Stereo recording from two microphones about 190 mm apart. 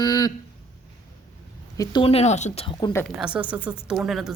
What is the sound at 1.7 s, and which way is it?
Speech, 20° left (ahead or behind).